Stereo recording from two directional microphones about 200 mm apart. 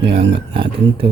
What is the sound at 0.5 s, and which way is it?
Speech, 25° right (ahead or behind).